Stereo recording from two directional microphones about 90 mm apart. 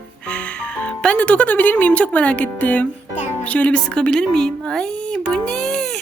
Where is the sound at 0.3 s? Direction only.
10° left (ahead or behind).